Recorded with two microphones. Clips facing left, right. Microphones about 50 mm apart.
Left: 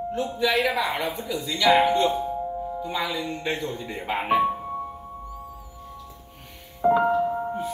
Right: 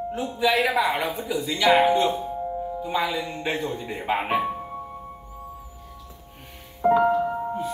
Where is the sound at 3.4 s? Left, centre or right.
Centre.